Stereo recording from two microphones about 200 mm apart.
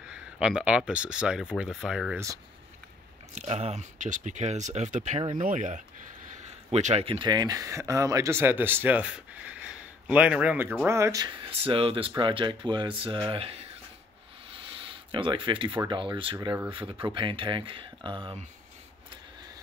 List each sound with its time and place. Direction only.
0.1 s speech: 5° right (ahead or behind)
2.1 s speech: 15° right (ahead or behind)
3.3 s speech: 30° right (ahead or behind)
14.5 s a sound: 25° right (ahead or behind)
15.9 s speech: 25° right (ahead or behind)